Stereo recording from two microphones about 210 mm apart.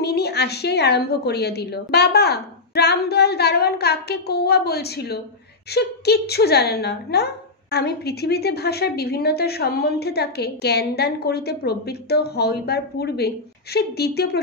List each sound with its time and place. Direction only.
0.0 s a woman's voice: 50° left (ahead or behind)